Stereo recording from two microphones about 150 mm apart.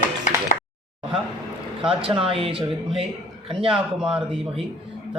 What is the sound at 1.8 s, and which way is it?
Speech, 35° right (ahead or behind).